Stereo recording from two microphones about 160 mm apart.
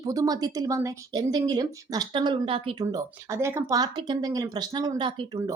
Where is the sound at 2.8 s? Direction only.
20° right (ahead or behind).